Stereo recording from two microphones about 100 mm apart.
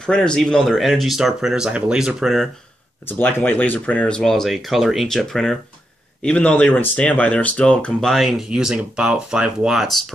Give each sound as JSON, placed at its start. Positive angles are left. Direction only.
{"t": 0.0, "sound": "a man's voice", "side_deg": 10}
{"t": 3.1, "sound": "speech", "side_deg": 20}